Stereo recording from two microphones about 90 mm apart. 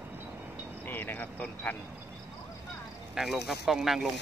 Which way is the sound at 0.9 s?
20° left (ahead or behind).